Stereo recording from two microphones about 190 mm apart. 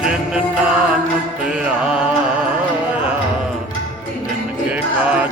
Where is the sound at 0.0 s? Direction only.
5° right (ahead or behind).